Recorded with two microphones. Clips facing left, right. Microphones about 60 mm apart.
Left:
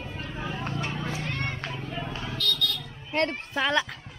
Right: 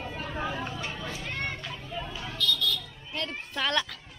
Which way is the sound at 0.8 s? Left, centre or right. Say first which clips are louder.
Left 4 dB; left.